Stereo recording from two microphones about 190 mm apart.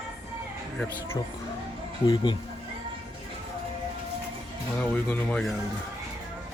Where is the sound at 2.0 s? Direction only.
25° left (ahead or behind).